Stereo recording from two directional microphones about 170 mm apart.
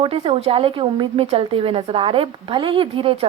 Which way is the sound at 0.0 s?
35° right (ahead or behind).